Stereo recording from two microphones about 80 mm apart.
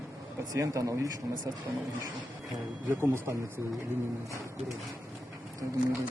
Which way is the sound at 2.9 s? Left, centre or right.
Right.